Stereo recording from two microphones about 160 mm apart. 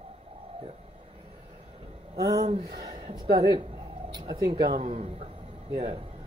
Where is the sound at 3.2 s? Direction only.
75° right (ahead or behind).